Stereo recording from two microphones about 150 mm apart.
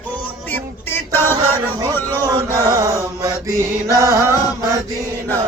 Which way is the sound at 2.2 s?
25° right (ahead or behind).